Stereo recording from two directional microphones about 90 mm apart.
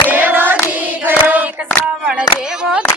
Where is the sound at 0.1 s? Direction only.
20° right (ahead or behind).